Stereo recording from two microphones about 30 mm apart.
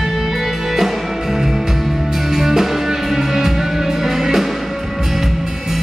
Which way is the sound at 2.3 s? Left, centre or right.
Centre.